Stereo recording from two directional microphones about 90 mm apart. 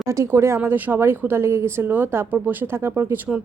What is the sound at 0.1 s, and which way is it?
A woman's voice, 30° right (ahead or behind).